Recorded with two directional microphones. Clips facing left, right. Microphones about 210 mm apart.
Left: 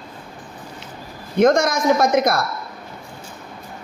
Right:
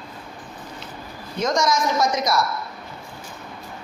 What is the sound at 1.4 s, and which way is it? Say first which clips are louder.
A man's voice: left 6 dB; 55° left (ahead or behind).